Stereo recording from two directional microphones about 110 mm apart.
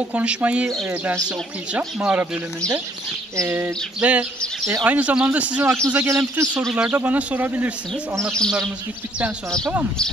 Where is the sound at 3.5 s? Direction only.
15° right (ahead or behind).